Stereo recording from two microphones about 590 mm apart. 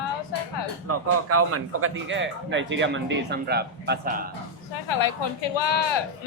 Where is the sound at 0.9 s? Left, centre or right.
Right.